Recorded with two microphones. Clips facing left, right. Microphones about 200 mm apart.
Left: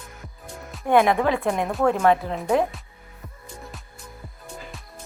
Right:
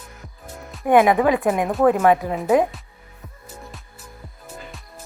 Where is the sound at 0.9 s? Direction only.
10° right (ahead or behind).